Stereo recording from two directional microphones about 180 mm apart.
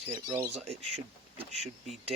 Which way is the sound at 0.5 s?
35° right (ahead or behind).